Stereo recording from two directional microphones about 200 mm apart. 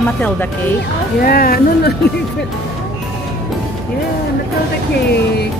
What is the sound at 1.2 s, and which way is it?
Speech, 45° left (ahead or behind).